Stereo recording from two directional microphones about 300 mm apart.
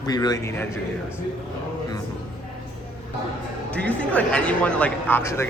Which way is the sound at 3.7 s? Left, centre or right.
Centre.